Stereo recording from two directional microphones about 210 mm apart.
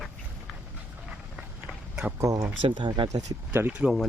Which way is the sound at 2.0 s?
5° right (ahead or behind).